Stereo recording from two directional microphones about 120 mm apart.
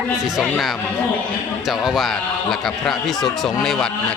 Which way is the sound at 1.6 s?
Centre (ahead or behind).